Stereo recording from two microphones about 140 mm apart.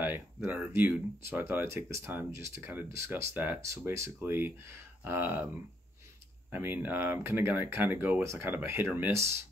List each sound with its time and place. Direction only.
0.0 s speech: 15° right (ahead or behind)